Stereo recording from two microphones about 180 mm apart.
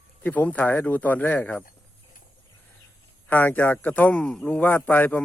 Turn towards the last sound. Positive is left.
turn(degrees=10)  # may be behind; listen again after turning